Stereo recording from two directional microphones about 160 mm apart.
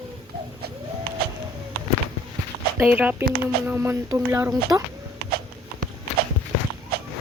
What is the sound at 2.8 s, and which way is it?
Speech, 10° right (ahead or behind).